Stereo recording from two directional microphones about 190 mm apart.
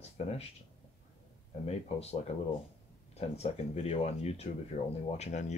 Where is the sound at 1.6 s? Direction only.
35° left (ahead or behind).